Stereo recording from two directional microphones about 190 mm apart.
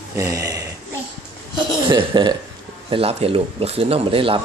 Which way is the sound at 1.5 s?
25° right (ahead or behind).